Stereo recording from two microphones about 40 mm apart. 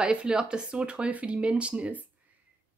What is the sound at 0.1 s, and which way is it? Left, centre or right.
Speech, right.